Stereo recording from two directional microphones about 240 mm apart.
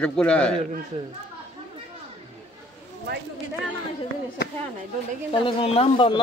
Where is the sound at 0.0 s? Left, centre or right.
Centre.